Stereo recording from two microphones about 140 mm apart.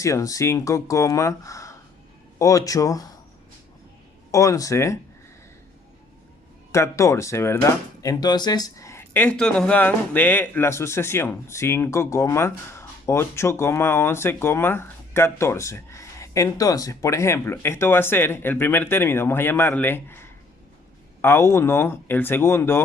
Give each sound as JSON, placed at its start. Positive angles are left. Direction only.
{"t": 0.0, "sound": "speech", "side_deg": 20}
{"t": 4.3, "sound": "speech", "side_deg": 25}
{"t": 6.7, "sound": "speech", "side_deg": 20}